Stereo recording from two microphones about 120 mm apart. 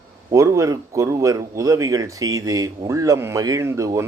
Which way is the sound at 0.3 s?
25° right (ahead or behind).